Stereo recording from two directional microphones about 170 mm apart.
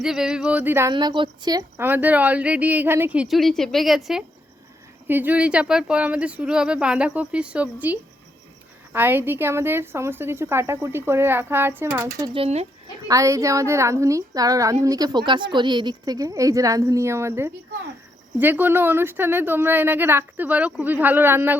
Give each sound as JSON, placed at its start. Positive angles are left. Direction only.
{"t": 0.0, "sound": "a sound", "side_deg": -5}
{"t": 0.9, "sound": "a woman's voice", "side_deg": -30}
{"t": 1.9, "sound": "a woman's voice", "side_deg": -10}
{"t": 5.0, "sound": "a woman's voice", "side_deg": -10}
{"t": 12.3, "sound": "speech", "side_deg": -35}
{"t": 13.1, "sound": "a woman's voice", "side_deg": -20}